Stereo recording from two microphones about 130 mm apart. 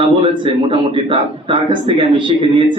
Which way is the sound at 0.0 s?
40° right (ahead or behind).